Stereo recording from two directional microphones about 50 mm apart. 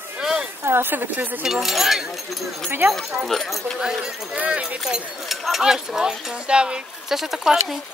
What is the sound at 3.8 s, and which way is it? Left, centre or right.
Speech, centre.